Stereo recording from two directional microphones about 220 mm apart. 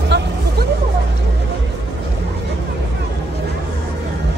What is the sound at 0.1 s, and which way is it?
Music, 50° right (ahead or behind).